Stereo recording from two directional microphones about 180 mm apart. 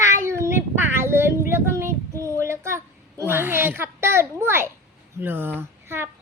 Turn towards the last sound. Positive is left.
turn(degrees=-15)  # may be behind; listen again after turning